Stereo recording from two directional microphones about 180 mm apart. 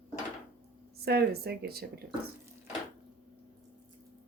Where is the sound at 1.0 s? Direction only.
60° right (ahead or behind).